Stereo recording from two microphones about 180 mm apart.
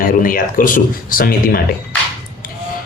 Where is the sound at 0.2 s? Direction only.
50° left (ahead or behind).